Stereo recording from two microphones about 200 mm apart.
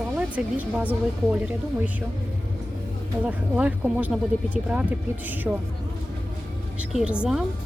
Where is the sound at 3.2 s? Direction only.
5° right (ahead or behind).